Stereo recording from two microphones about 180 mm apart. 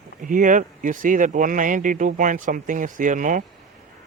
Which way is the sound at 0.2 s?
45° right (ahead or behind).